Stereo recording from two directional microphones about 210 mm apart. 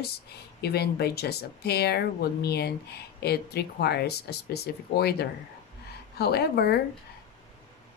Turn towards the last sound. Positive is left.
turn(degrees=50)  # may be behind; listen again after turning